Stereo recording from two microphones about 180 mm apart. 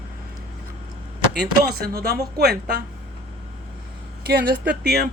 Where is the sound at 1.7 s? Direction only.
60° right (ahead or behind).